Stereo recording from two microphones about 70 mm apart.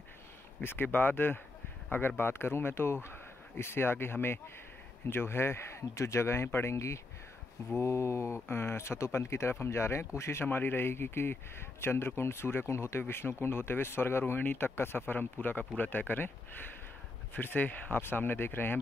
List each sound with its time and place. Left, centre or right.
0.6 s speech: left
17.3 s speech: left